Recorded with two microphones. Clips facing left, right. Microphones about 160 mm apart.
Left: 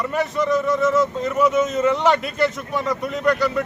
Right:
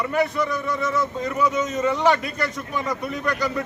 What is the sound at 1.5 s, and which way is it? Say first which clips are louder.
Speech: left 4 dB; centre (ahead or behind).